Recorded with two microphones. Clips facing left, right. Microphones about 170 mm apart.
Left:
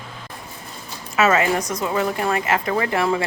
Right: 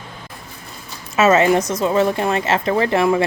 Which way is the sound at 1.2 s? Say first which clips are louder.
Right 4 dB; 20° right (ahead or behind).